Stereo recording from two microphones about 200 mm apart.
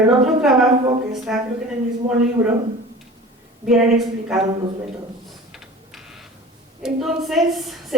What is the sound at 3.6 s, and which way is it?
Speech, centre (ahead or behind).